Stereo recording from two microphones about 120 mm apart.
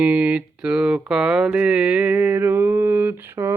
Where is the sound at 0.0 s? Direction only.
10° right (ahead or behind).